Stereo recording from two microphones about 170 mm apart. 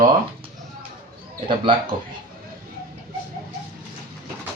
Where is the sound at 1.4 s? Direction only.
30° right (ahead or behind).